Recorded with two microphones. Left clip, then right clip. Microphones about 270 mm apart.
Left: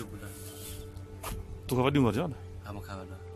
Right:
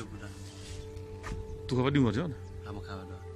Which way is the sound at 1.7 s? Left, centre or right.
Centre.